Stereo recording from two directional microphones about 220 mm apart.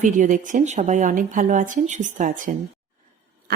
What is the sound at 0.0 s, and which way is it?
A woman's voice, 35° right (ahead or behind).